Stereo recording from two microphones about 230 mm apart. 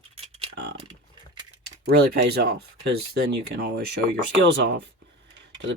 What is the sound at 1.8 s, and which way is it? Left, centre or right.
Speech, right.